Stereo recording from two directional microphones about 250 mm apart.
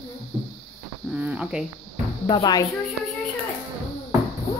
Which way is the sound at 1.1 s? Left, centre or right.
Centre.